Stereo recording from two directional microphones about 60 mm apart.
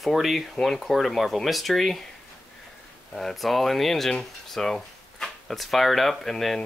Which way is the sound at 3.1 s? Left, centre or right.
Centre.